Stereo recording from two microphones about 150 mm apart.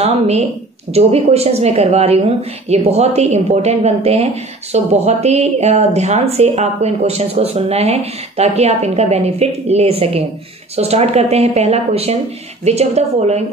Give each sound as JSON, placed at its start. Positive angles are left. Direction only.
{"t": 0.0, "sound": "speech", "side_deg": -45}